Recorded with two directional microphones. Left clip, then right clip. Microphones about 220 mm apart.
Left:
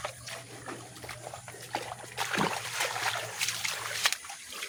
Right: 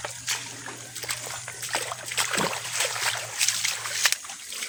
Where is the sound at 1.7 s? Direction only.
55° right (ahead or behind).